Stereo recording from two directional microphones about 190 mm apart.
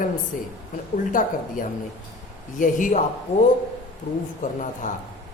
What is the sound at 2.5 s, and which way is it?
Speech, 40° left (ahead or behind).